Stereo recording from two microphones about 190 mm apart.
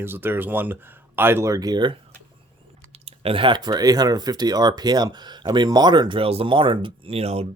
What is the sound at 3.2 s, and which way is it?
Speech, 25° right (ahead or behind).